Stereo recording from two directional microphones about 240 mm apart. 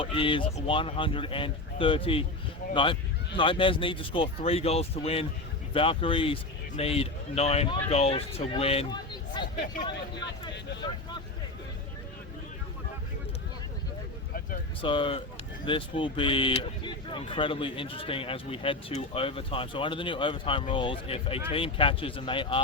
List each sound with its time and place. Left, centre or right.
0.0 s speech: left
14.8 s speech: left